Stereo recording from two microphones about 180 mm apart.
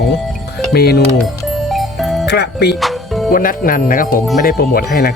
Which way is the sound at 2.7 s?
Centre (ahead or behind).